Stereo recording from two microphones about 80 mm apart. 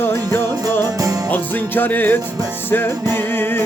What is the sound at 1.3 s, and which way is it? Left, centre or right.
Music, left.